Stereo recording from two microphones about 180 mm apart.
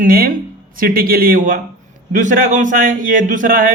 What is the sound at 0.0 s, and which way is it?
Speech, 50° right (ahead or behind).